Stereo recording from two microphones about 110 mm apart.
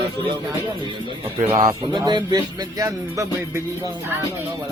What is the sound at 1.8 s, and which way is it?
Speech, 40° right (ahead or behind).